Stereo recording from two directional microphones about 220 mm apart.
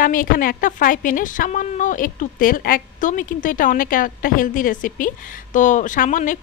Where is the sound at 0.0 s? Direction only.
40° left (ahead or behind).